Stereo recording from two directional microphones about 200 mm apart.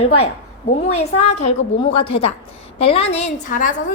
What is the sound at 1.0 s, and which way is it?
A woman's voice, 35° left (ahead or behind).